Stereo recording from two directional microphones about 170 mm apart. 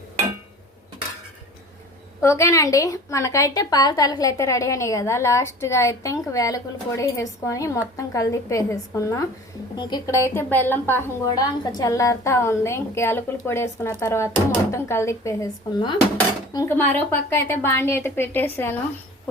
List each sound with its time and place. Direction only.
2.2 s a woman's voice: 15° left (ahead or behind)